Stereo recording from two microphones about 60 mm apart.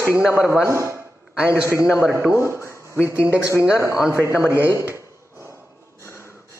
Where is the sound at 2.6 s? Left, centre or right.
Left.